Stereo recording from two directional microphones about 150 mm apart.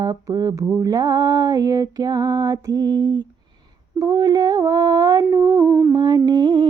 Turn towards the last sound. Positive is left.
turn(degrees=-30)  # may be behind; listen again after turning